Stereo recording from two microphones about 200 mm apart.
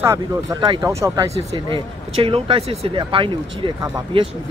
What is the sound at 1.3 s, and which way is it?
Speech, 25° right (ahead or behind).